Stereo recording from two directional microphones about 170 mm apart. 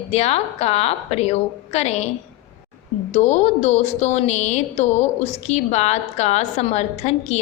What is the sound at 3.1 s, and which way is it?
A woman's voice, 40° left (ahead or behind).